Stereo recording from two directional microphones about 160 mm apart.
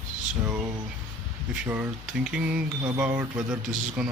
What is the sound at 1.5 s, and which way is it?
Speech, 10° right (ahead or behind).